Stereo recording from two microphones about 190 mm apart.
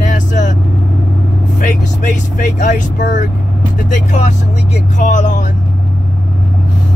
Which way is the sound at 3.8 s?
40° left (ahead or behind).